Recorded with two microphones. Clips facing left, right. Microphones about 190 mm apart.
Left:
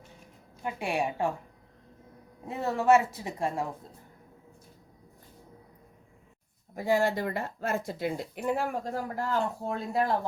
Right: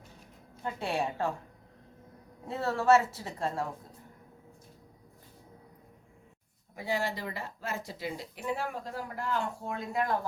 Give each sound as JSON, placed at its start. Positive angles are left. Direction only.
{"t": 0.6, "sound": "a woman's voice", "side_deg": 15}
{"t": 2.5, "sound": "a woman's voice", "side_deg": 15}
{"t": 6.7, "sound": "speech", "side_deg": 45}